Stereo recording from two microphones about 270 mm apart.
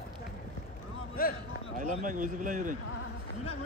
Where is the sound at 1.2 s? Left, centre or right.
Left.